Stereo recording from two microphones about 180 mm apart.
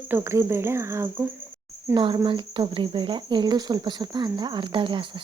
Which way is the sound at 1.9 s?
25° right (ahead or behind).